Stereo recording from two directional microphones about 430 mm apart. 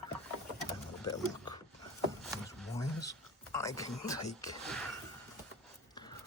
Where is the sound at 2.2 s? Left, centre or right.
Centre.